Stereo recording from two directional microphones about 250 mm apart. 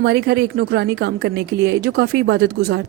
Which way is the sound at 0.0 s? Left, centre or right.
Right.